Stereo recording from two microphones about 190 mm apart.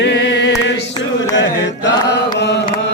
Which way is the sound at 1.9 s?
65° left (ahead or behind).